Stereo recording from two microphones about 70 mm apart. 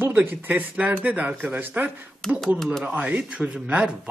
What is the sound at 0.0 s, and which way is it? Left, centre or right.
Speech, right.